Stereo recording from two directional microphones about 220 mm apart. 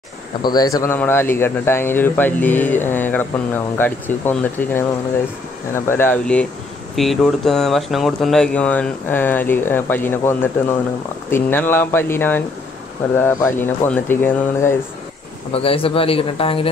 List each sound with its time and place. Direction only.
0.4 s speech: 20° left (ahead or behind)
5.9 s speech: 10° left (ahead or behind)
15.5 s speech: 25° left (ahead or behind)